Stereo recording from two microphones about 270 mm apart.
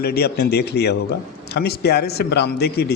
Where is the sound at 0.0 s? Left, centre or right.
Left.